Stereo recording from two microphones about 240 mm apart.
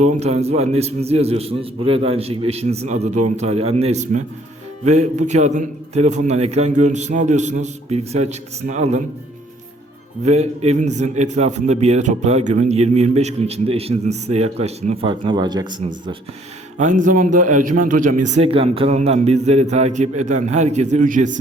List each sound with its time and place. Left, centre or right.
0.0 s a man's voice: right
10.2 s a man's voice: right
16.7 s a man's voice: right